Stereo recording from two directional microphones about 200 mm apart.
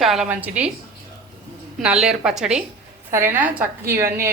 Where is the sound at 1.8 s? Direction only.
5° right (ahead or behind).